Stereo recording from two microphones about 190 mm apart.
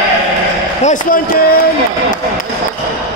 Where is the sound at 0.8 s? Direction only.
45° left (ahead or behind).